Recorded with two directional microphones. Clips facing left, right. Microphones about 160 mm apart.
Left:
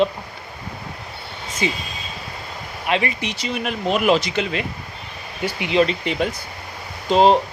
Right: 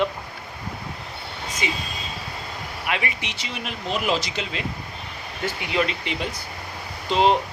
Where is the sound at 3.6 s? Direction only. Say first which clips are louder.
Left 7 dB; 60° left (ahead or behind).